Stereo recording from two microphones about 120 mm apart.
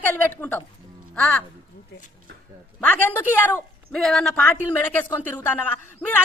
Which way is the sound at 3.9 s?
5° left (ahead or behind).